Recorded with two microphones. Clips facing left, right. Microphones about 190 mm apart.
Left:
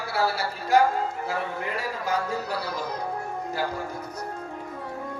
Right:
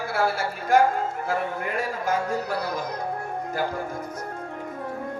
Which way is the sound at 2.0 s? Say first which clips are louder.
Right 1 dB; 50° right (ahead or behind).